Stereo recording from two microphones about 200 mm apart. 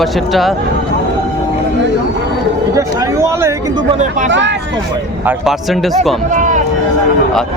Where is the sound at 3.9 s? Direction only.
35° right (ahead or behind).